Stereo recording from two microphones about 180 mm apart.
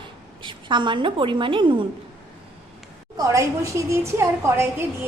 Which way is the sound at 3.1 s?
20° right (ahead or behind).